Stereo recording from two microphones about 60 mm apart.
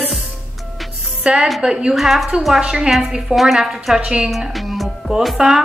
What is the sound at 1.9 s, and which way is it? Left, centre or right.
A woman's voice, centre.